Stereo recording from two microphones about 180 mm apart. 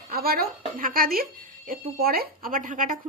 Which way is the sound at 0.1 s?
55° right (ahead or behind).